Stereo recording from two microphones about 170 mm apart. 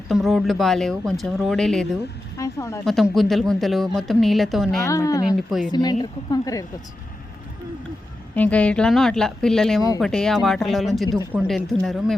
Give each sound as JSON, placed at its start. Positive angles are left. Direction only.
{"t": 0.1, "sound": "a woman's voice", "side_deg": 0}
{"t": 2.4, "sound": "a woman's voice", "side_deg": 15}
{"t": 2.8, "sound": "a woman's voice", "side_deg": 0}
{"t": 4.9, "sound": "a woman's voice", "side_deg": 20}
{"t": 5.4, "sound": "a woman's voice", "side_deg": 0}
{"t": 5.7, "sound": "a woman's voice", "side_deg": 25}
{"t": 8.4, "sound": "a woman's voice", "side_deg": 10}